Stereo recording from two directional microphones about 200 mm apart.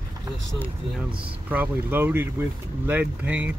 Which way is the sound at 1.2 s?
5° right (ahead or behind).